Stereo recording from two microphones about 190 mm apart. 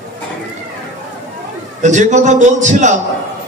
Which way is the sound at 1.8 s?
40° right (ahead or behind).